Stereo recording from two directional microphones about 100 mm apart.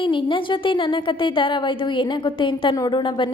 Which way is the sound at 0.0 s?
55° left (ahead or behind).